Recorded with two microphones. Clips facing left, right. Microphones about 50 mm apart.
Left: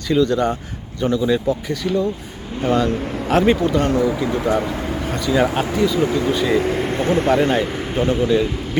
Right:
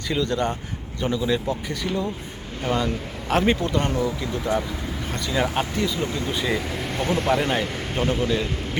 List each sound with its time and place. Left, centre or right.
0.1 s speech: centre
4.0 s speech: left
5.0 s speech: centre
6.8 s speech: centre